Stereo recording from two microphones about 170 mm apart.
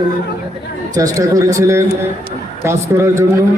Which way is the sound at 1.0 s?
20° right (ahead or behind).